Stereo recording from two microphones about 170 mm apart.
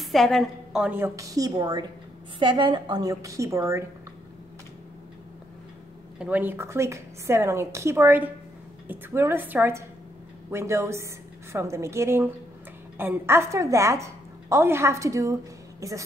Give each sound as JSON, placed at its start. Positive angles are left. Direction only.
{"t": 0.0, "sound": "a woman's voice", "side_deg": 0}
{"t": 6.1, "sound": "a woman's voice", "side_deg": -10}